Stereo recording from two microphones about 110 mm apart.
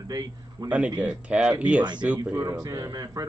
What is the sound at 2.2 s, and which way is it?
A man's voice, 30° right (ahead or behind).